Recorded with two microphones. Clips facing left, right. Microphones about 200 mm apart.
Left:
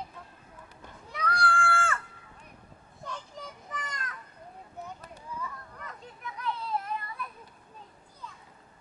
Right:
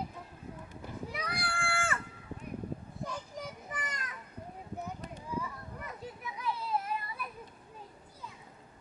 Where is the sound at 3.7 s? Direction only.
15° right (ahead or behind).